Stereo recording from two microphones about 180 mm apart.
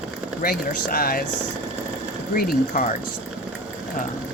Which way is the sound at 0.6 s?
55° left (ahead or behind).